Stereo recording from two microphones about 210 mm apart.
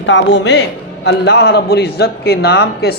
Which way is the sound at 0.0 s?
60° left (ahead or behind).